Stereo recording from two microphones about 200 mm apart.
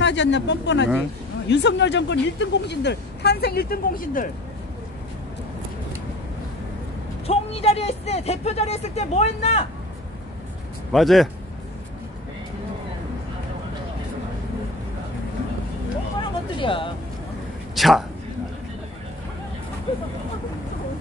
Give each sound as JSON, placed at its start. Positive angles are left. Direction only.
{"t": 0.0, "sound": "speech", "side_deg": 60}
{"t": 7.2, "sound": "speech", "side_deg": 30}
{"t": 10.9, "sound": "speech", "side_deg": 0}
{"t": 16.2, "sound": "a sound", "side_deg": 25}
{"t": 17.7, "sound": "a man's voice", "side_deg": 0}